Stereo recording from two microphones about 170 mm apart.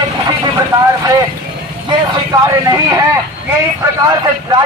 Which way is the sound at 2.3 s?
20° right (ahead or behind).